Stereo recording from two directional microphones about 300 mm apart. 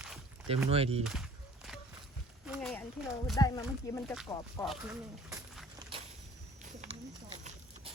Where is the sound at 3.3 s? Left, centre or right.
Centre.